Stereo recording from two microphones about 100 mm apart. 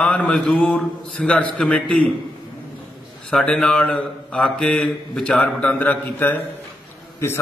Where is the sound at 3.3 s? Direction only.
10° left (ahead or behind).